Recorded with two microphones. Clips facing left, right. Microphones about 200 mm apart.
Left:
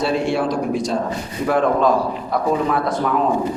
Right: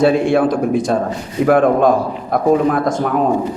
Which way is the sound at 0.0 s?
55° right (ahead or behind).